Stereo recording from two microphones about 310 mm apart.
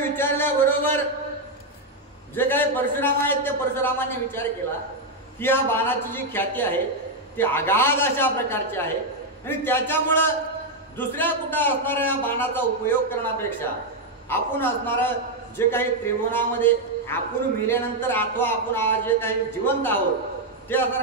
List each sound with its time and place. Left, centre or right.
0.1 s speech: centre
2.3 s a man's voice: centre